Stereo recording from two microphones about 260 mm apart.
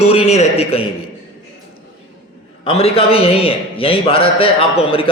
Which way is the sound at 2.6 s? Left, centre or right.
Left.